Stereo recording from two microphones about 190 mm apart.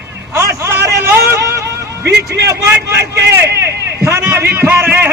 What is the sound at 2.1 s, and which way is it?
Speech, 60° right (ahead or behind).